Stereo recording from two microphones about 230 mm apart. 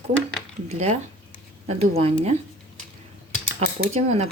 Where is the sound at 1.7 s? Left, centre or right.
Right.